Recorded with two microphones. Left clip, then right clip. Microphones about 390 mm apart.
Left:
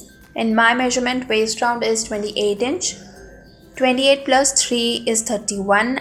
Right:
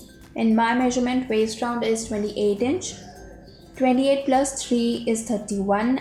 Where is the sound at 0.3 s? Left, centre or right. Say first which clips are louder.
Left 5 dB; left.